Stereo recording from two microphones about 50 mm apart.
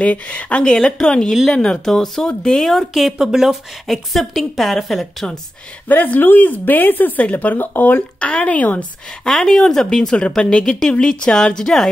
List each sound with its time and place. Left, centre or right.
0.0 s speech: left
2.7 s a woman's voice: centre
3.1 s speech: centre
3.8 s a woman's voice: centre
5.9 s speech: left
7.6 s speech: left
8.2 s speech: left
9.2 s speech: centre